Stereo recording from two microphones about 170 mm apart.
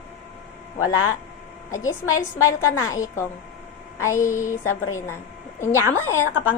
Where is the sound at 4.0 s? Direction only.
15° left (ahead or behind).